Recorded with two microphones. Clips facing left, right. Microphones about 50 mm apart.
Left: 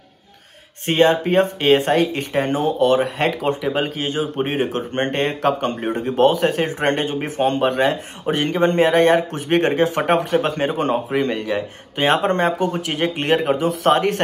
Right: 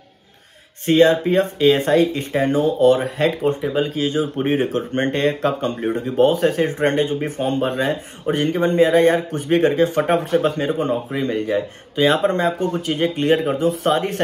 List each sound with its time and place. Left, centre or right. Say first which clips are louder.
0.8 s speech: right 2 dB; left
3.3 s speech: right 1 dB; left
13.6 s a man's voice: left 1 dB; left
13.9 s speech: left 2 dB; left